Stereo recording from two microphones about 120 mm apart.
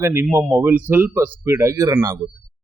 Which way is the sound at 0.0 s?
20° right (ahead or behind).